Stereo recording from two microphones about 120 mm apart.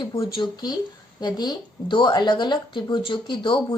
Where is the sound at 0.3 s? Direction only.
35° left (ahead or behind).